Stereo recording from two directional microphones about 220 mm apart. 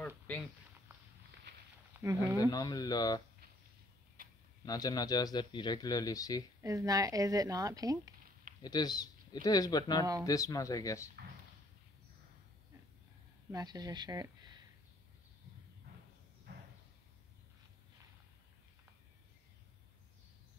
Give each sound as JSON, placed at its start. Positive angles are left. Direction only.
{"t": 2.0, "sound": "speech", "side_deg": -15}
{"t": 2.5, "sound": "speech", "side_deg": 15}
{"t": 4.2, "sound": "tick-tock", "side_deg": -40}
{"t": 4.6, "sound": "speech", "side_deg": 15}
{"t": 6.6, "sound": "speech", "side_deg": -15}
{"t": 8.6, "sound": "speech", "side_deg": 20}
{"t": 13.5, "sound": "speech", "side_deg": -15}